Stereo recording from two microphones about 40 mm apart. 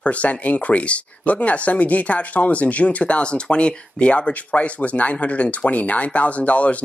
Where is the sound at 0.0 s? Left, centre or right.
Left.